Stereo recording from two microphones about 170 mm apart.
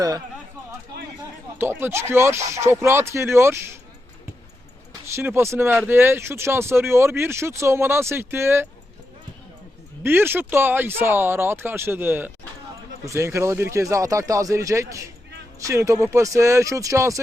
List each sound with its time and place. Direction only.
1.5 s speech: 15° right (ahead or behind)
5.1 s speech: 15° right (ahead or behind)
10.0 s speech: 15° right (ahead or behind)